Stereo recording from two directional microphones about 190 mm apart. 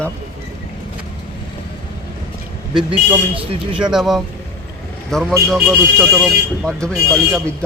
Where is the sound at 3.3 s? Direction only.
25° right (ahead or behind).